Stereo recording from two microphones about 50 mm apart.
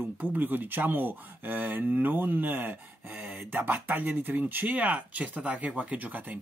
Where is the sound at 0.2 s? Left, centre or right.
Right.